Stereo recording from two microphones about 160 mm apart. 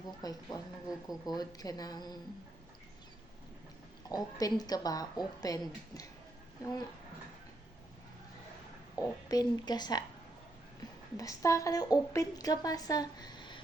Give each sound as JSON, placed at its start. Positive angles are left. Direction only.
{"t": 0.2, "sound": "a woman's voice", "side_deg": 25}
{"t": 4.1, "sound": "a woman's voice", "side_deg": 25}
{"t": 9.0, "sound": "a woman's voice", "side_deg": 25}
{"t": 11.2, "sound": "a woman's voice", "side_deg": 20}